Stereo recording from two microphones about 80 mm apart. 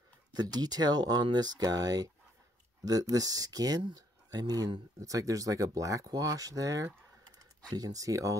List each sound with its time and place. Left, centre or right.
0.3 s speech: right